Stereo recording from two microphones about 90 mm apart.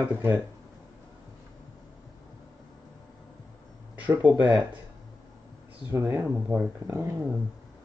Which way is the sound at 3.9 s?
15° right (ahead or behind).